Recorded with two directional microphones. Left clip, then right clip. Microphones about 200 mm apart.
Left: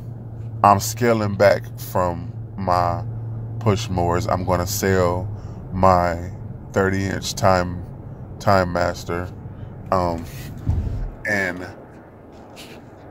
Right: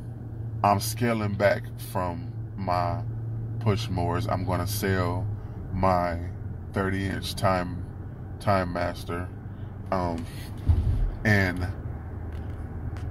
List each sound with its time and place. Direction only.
0.6 s speech: 40° left (ahead or behind)
9.8 s speech: 25° left (ahead or behind)